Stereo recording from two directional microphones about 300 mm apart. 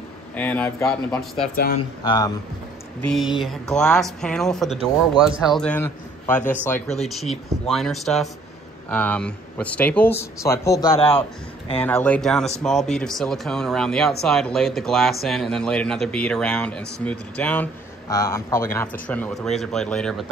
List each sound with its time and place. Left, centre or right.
0.4 s speech: centre
1.3 s speech: centre
3.0 s speech: centre
11.8 s speech: centre